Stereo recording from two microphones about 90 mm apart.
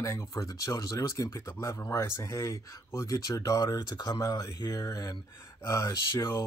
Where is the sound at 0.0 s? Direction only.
35° left (ahead or behind).